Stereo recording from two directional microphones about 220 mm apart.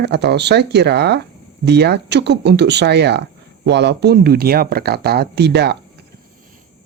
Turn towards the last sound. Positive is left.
turn(degrees=-50)  # may be behind; listen again after turning